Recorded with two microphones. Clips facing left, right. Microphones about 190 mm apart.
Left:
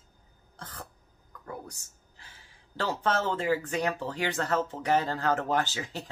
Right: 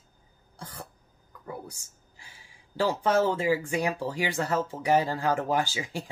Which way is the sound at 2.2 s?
10° right (ahead or behind).